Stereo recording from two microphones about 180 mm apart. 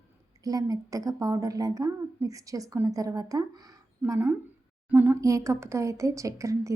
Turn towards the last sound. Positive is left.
turn(degrees=-15)  # may be behind; listen again after turning